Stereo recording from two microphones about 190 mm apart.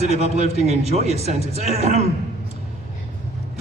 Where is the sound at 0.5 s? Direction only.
35° right (ahead or behind).